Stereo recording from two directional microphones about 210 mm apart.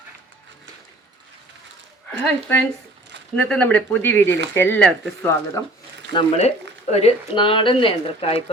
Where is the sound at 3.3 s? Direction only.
5° left (ahead or behind).